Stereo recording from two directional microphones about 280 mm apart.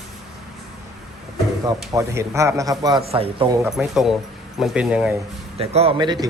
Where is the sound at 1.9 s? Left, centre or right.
Centre.